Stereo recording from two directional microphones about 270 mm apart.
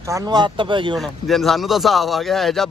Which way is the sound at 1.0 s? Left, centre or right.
Centre.